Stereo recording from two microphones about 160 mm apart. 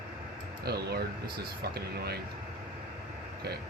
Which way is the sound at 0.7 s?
90° right.